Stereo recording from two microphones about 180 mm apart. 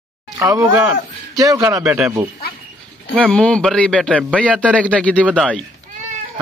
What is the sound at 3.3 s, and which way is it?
A man's voice, 5° left (ahead or behind).